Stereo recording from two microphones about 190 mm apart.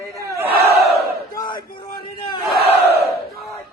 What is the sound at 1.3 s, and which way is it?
Battle cry, 25° left (ahead or behind).